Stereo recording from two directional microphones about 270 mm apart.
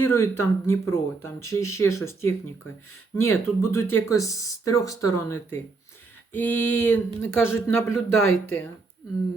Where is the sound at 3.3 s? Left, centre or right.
Centre.